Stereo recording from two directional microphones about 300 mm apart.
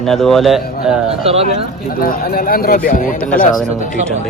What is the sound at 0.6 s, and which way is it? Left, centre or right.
Speech, left.